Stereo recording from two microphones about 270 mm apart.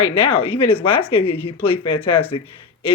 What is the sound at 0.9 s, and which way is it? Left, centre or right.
Speech, centre.